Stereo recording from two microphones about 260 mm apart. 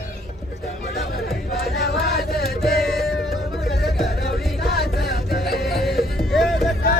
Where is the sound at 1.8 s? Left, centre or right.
Left.